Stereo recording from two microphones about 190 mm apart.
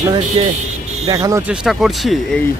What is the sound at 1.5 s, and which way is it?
Speech, centre (ahead or behind).